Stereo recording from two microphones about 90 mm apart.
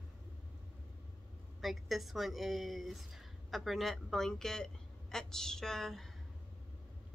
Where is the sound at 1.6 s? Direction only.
Centre (ahead or behind).